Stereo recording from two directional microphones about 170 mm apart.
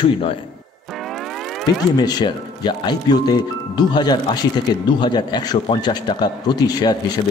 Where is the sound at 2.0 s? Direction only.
25° left (ahead or behind).